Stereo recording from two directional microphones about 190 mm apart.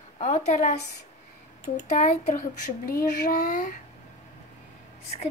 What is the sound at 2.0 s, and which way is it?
Speech, 40° left (ahead or behind).